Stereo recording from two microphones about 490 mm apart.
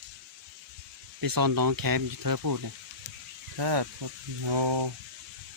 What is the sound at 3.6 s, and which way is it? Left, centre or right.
Speech, right.